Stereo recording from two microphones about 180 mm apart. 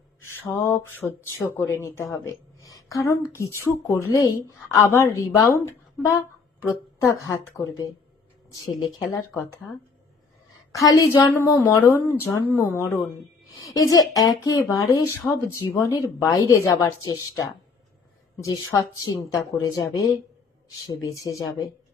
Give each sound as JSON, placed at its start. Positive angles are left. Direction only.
{"t": 0.2, "sound": "mantra", "side_deg": 15}
{"t": 1.5, "sound": "a woman's voice", "side_deg": 15}
{"t": 2.1, "sound": "a sound", "side_deg": 20}
{"t": 2.9, "sound": "a woman's voice", "side_deg": 15}
{"t": 10.7, "sound": "a woman's voice", "side_deg": 20}